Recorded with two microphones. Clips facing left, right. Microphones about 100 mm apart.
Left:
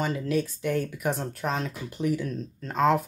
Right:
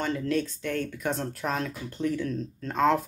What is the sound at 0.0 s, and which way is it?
Speech, 5° left (ahead or behind).